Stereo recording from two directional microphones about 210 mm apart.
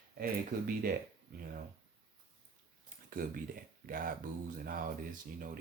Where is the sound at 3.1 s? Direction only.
45° right (ahead or behind).